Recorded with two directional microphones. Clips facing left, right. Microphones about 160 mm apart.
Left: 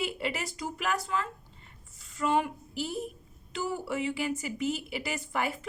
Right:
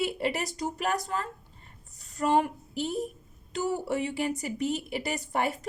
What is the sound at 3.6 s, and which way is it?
Speech, 40° right (ahead or behind).